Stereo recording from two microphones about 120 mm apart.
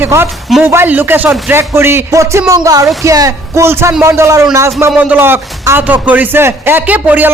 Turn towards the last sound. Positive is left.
turn(degrees=-15)  # may be behind; listen again after turning